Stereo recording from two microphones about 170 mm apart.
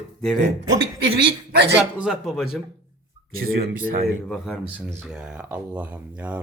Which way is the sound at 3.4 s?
60° right (ahead or behind).